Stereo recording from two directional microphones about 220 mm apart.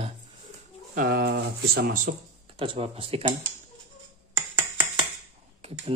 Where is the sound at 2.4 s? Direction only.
25° right (ahead or behind).